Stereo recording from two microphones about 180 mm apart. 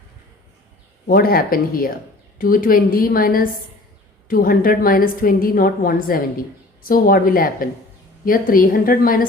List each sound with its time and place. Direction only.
1.0 s a woman's voice: 55° left (ahead or behind)